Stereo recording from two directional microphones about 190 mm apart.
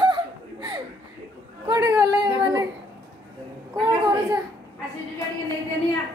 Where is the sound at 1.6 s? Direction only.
20° right (ahead or behind).